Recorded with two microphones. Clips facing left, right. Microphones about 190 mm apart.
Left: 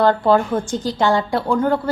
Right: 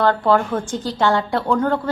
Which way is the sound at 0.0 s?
15° left (ahead or behind).